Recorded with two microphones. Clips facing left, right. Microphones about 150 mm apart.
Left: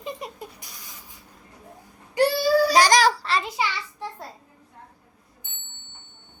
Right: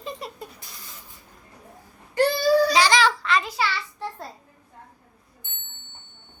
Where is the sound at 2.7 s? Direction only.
45° left (ahead or behind).